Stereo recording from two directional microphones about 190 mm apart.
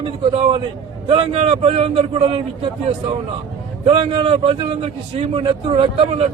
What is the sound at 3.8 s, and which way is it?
A man's voice, 25° right (ahead or behind).